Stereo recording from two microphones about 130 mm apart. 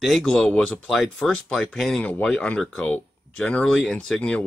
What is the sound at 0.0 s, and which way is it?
Speech, centre (ahead or behind).